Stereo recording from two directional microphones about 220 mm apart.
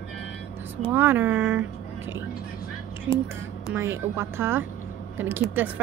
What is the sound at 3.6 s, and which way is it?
A woman's voice, 10° right (ahead or behind).